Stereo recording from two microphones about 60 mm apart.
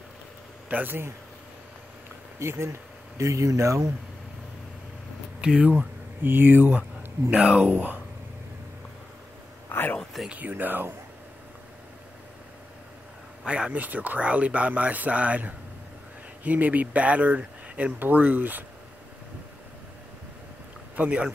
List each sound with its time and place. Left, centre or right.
0.7 s speech: right
2.3 s speech: right
3.2 s speech: right
5.4 s speech: centre
6.2 s speech: right
9.7 s a sound: left
10.3 s speech: right
13.5 s speech: centre
20.9 s a man's voice: right